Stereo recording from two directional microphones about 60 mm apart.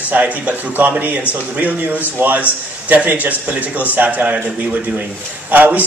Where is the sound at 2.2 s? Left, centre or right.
Right.